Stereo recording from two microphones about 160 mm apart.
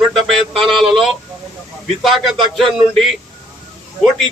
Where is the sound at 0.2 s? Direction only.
Centre (ahead or behind).